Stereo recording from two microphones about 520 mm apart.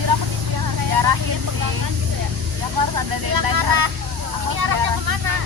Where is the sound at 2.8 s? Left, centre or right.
Right.